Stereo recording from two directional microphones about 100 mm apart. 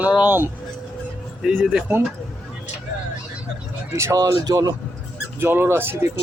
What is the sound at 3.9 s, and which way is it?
Speech, 30° right (ahead or behind).